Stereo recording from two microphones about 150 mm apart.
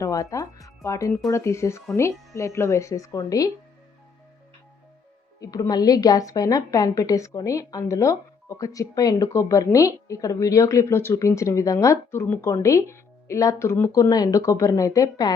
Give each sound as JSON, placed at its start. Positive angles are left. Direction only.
{"t": 0.0, "sound": "a woman's voice", "side_deg": 20}
{"t": 5.4, "sound": "a woman's voice", "side_deg": 25}